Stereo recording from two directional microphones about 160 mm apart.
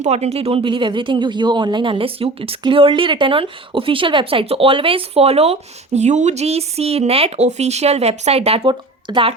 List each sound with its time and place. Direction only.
0.0 s speech: 45° right (ahead or behind)